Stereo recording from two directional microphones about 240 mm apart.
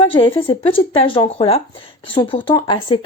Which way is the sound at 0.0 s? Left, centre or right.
Left.